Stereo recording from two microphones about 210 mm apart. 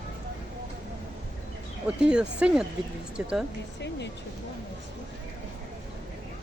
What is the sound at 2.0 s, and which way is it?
Speech, 5° right (ahead or behind).